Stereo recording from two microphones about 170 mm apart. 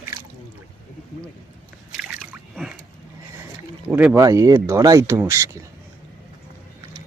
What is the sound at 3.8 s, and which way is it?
Speech, 10° right (ahead or behind).